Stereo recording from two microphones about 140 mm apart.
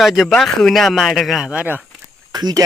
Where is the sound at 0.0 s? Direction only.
Centre (ahead or behind).